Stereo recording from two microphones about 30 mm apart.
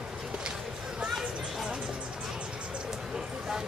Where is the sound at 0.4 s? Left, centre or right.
Right.